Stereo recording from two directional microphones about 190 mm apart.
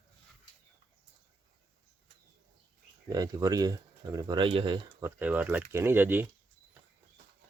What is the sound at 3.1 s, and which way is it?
Speech, 20° right (ahead or behind).